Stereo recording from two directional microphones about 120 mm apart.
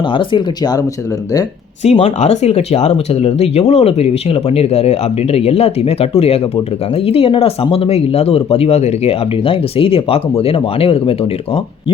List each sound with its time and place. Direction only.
0.1 s speech: 45° left (ahead or behind)
1.8 s speech: 60° left (ahead or behind)